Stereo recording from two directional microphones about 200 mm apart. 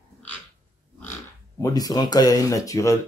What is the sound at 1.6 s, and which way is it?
Speech, 15° left (ahead or behind).